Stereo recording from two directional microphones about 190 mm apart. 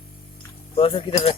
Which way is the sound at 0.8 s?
30° left (ahead or behind).